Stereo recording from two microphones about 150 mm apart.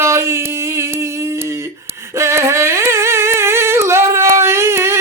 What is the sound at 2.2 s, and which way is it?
Humming, 20° right (ahead or behind).